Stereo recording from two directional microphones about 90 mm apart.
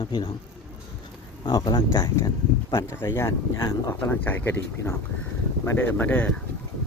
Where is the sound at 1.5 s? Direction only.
55° left (ahead or behind).